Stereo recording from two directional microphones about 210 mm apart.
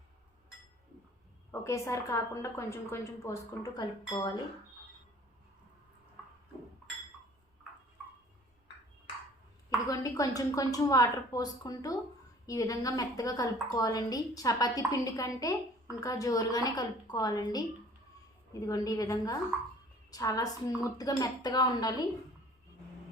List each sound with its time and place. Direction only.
1.5 s a woman's voice: 15° left (ahead or behind)
9.6 s a woman's voice: 15° left (ahead or behind)